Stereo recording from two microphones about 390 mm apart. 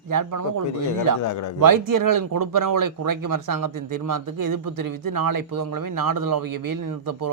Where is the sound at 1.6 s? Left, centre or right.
Right.